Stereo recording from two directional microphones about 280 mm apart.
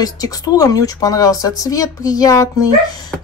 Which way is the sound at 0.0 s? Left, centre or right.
Centre.